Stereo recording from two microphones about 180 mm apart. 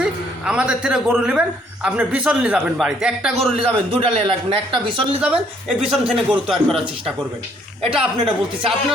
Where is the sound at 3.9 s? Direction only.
30° right (ahead or behind).